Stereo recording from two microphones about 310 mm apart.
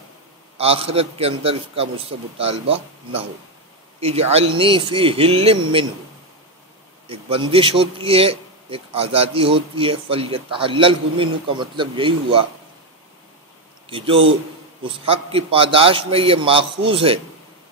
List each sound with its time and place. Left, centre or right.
0.6 s a man's voice: centre
7.1 s a man's voice: centre
13.8 s a man's voice: centre